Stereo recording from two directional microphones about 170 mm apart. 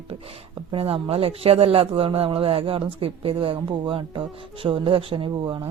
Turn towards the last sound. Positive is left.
turn(degrees=-30)  # may be behind; listen again after turning